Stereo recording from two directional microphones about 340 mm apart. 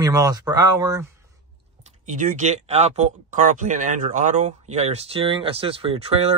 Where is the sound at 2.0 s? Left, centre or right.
Right.